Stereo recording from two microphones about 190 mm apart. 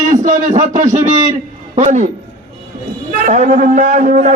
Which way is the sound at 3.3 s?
45° right (ahead or behind).